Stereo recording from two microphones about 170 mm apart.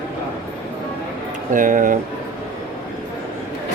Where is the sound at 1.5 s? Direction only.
50° right (ahead or behind).